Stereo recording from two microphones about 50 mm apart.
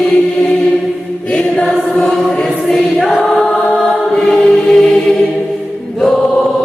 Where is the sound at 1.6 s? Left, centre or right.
Centre.